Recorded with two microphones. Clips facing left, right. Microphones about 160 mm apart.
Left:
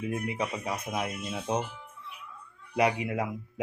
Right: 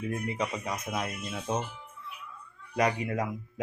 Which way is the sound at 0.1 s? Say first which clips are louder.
Even; 10° left (ahead or behind).